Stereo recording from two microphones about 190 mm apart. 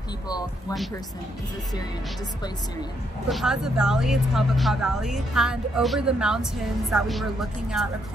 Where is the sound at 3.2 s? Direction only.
Centre (ahead or behind).